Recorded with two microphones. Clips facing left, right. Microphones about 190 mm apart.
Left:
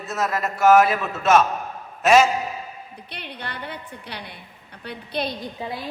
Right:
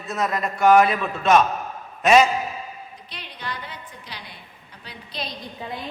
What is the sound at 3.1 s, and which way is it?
A woman's voice, 60° left (ahead or behind).